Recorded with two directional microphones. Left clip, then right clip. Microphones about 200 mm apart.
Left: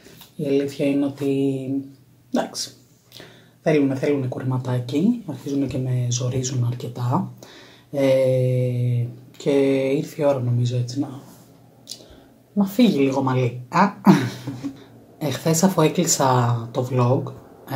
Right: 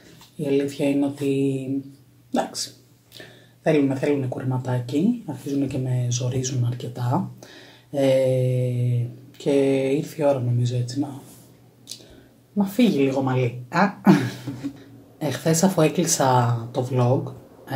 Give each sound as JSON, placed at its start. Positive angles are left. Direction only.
{"t": 0.4, "sound": "speech", "side_deg": 0}
{"t": 12.5, "sound": "speech", "side_deg": 0}